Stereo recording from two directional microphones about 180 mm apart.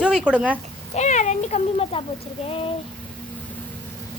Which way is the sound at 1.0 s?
40° left (ahead or behind).